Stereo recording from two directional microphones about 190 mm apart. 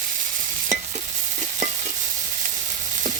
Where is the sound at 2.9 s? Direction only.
40° right (ahead or behind).